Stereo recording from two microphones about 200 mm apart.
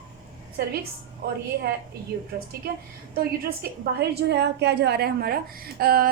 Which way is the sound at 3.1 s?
50° right (ahead or behind).